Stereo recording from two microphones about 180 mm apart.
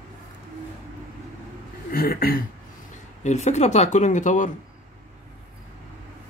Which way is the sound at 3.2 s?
40° left (ahead or behind).